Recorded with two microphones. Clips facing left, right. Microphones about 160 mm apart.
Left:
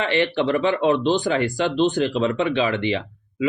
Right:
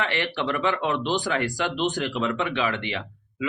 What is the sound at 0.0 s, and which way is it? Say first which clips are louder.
Speech: left 6 dB; 25° left (ahead or behind).